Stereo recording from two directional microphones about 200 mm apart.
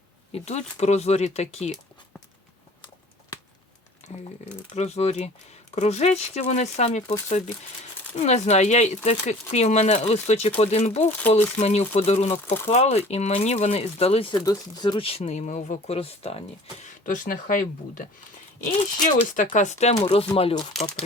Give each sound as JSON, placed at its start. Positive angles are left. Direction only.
{"t": 0.3, "sound": "speech", "side_deg": 30}
{"t": 4.7, "sound": "speech", "side_deg": 35}
{"t": 16.8, "sound": "speech", "side_deg": 40}